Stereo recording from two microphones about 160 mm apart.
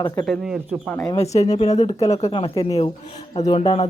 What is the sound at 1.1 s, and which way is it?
Speech, 40° left (ahead or behind).